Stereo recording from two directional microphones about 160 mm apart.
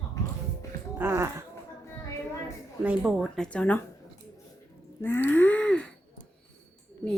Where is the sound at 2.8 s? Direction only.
5° right (ahead or behind).